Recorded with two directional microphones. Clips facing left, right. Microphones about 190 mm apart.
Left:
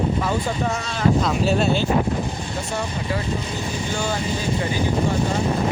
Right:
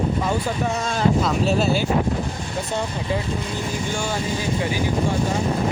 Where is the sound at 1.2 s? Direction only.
Centre (ahead or behind).